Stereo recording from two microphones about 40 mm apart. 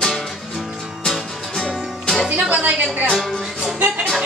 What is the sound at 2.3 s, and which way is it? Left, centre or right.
Speech, right.